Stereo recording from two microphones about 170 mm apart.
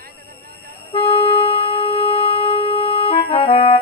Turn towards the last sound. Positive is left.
turn(degrees=35)  # may be behind; listen again after turning